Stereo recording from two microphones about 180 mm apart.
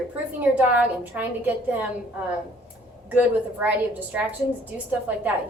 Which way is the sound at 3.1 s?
10° right (ahead or behind).